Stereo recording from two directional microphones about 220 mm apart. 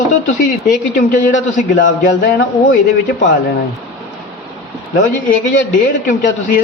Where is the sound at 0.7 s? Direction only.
35° left (ahead or behind).